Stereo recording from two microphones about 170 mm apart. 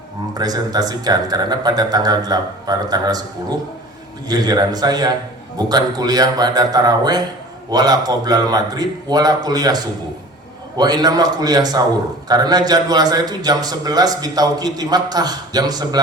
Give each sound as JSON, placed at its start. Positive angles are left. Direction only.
{"t": 0.3, "sound": "a man's voice", "side_deg": -25}
{"t": 4.3, "sound": "a man's voice", "side_deg": -25}